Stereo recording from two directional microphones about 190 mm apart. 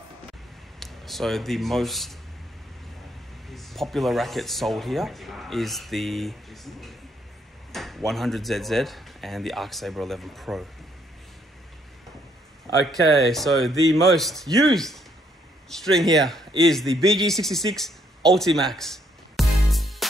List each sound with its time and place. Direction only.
0.7 s a man's voice: centre (ahead or behind)
3.4 s speech: centre (ahead or behind)
12.9 s a man's voice: centre (ahead or behind)